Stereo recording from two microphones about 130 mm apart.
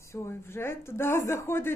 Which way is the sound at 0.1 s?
20° left (ahead or behind).